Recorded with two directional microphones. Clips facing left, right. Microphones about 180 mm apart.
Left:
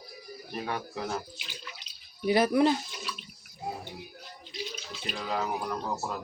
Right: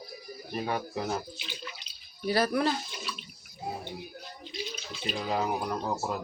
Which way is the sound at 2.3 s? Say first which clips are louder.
Left 4 dB; 20° left (ahead or behind).